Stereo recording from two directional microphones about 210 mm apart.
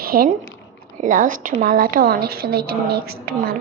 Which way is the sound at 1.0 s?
40° right (ahead or behind).